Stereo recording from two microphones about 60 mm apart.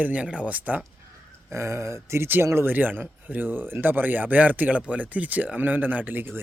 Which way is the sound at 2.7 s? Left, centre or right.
Right.